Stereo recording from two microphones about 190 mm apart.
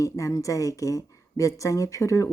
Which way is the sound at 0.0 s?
15° left (ahead or behind).